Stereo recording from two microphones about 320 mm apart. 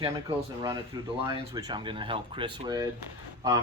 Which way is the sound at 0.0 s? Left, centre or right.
Centre.